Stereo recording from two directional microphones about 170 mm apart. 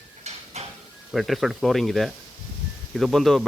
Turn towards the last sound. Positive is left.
turn(degrees=0)  # may be behind; listen again after turning